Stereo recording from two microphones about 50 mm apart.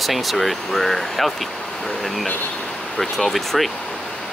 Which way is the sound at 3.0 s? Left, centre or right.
Centre.